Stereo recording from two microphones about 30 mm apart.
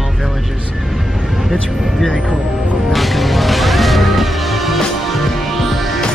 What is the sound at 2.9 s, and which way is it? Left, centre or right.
Music, centre.